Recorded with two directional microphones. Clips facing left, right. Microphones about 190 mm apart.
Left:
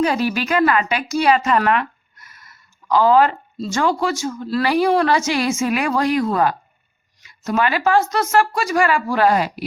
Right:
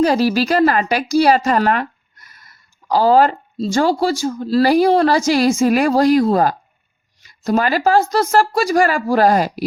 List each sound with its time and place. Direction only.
0.0 s speech: 35° right (ahead or behind)